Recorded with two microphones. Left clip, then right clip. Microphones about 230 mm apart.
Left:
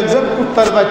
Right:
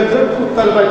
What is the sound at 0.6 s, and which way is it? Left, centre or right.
Speech, left.